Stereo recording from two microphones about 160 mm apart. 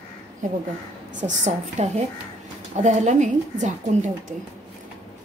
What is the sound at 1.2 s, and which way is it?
A woman's voice, 45° right (ahead or behind).